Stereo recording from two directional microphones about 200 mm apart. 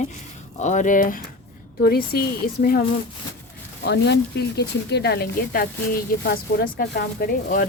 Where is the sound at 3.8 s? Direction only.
60° left (ahead or behind).